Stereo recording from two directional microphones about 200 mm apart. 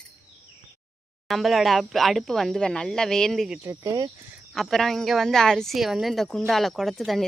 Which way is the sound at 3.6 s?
15° right (ahead or behind).